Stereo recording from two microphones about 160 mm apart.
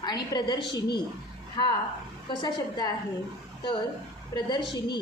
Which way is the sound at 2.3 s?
25° left (ahead or behind).